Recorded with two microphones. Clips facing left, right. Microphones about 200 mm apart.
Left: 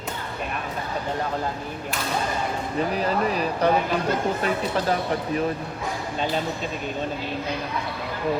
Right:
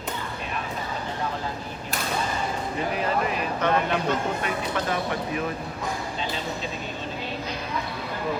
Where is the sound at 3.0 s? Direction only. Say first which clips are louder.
Left 1 dB; 35° left (ahead or behind).